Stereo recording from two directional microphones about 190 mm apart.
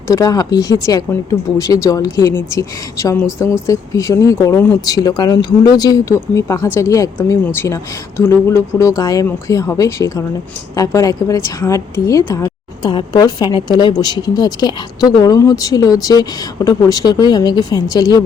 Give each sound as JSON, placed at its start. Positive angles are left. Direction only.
{"t": 0.1, "sound": "speech", "side_deg": 20}